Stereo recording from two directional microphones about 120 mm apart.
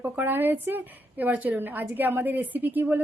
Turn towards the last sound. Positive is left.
turn(degrees=-15)  # may be behind; listen again after turning